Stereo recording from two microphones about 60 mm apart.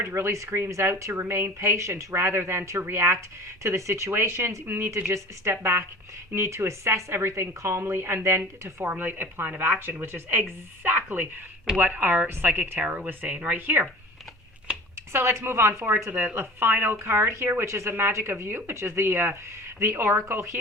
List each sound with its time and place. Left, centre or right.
0.0 s a woman's voice: right
9.0 s speech: right
10.8 s a sound: right
11.8 s a woman's voice: right
15.1 s a woman's voice: right